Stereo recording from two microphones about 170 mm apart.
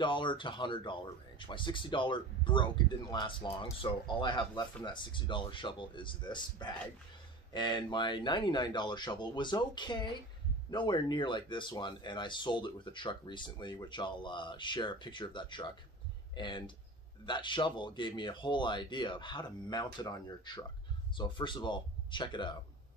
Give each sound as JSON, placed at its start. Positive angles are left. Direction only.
{"t": 0.0, "sound": "speech", "side_deg": 30}